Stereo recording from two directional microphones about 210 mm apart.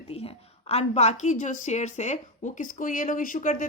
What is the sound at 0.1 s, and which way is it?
A woman's voice, 30° left (ahead or behind).